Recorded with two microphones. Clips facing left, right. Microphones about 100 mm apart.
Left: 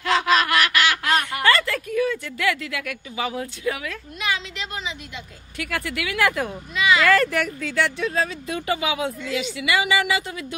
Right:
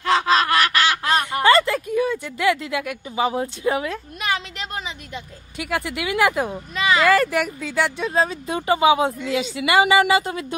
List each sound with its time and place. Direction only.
0.0 s goose: 30° right (ahead or behind)
1.0 s speech: 20° right (ahead or behind)
4.2 s a sound: 45° right (ahead or behind)
5.6 s speech: 20° right (ahead or behind)
6.7 s a woman's voice: 35° right (ahead or behind)
7.1 s a woman's voice: 10° right (ahead or behind); by 10.4 s 40° right (ahead or behind)